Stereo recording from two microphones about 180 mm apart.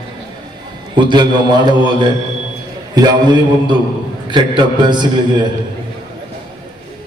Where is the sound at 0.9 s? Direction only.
25° right (ahead or behind).